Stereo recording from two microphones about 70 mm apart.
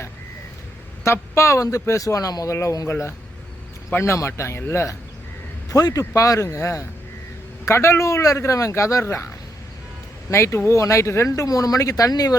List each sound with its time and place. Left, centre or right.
1.0 s a man's voice: left
5.6 s speech: left
10.3 s a man's voice: left
11.3 s speech: left